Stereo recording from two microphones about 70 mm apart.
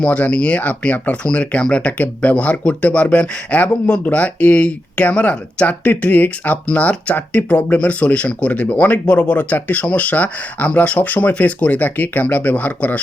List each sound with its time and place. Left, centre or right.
0.0 s speech: centre